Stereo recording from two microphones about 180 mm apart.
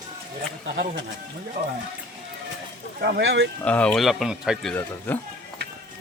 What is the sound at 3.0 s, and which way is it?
Speech, 75° right (ahead or behind).